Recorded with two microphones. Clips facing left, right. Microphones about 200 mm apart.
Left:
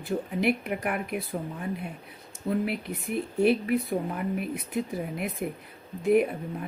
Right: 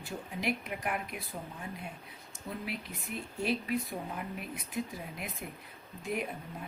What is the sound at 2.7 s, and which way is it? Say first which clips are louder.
Speech: left 8 dB; 60° left (ahead or behind).